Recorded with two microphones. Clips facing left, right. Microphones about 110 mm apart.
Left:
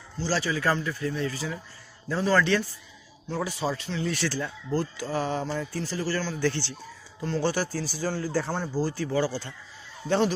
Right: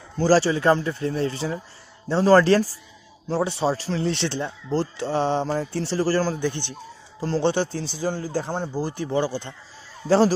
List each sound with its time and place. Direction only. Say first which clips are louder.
0.4 s speech: right 7 dB; 30° right (ahead or behind)
6.4 s speech: right 1 dB; 15° right (ahead or behind)
7.2 s speech: right 5 dB; 30° right (ahead or behind)
10.0 s speech: right 6 dB; 35° right (ahead or behind)